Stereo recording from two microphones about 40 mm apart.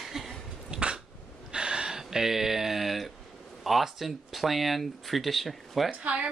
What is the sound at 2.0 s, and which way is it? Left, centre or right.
Speech, centre.